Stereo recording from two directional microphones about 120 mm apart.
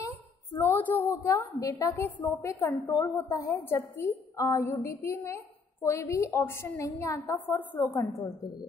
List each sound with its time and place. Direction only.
0.6 s a woman's voice: 15° left (ahead or behind)
7.9 s a woman's voice: 30° left (ahead or behind)